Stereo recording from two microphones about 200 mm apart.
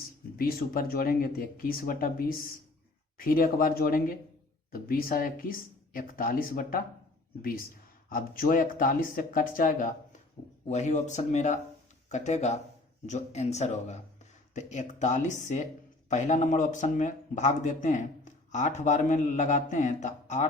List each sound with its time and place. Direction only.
0.3 s speech: 45° left (ahead or behind)
8.1 s speech: 45° left (ahead or behind)